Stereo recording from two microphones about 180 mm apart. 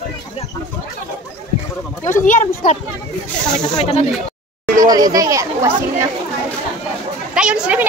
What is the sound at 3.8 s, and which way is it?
Speech, 35° left (ahead or behind).